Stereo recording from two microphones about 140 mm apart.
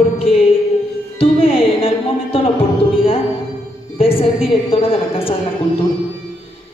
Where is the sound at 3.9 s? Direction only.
45° left (ahead or behind).